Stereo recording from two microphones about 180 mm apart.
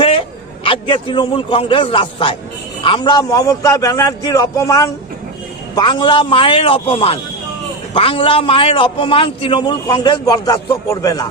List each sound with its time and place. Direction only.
0.0 s a man's voice: 30° left (ahead or behind)